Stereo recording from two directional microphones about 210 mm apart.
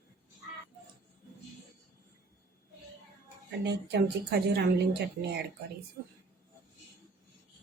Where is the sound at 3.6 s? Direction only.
55° right (ahead or behind).